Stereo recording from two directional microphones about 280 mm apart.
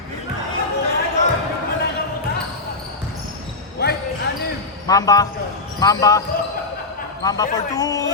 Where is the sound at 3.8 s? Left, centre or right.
Left.